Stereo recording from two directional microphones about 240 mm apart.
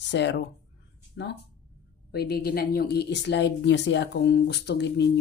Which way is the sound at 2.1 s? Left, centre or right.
Left.